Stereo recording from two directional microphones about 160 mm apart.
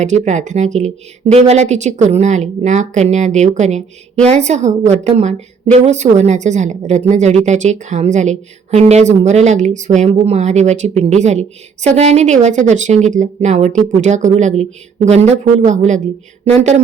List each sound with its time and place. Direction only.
0.0 s a woman's voice: 45° right (ahead or behind)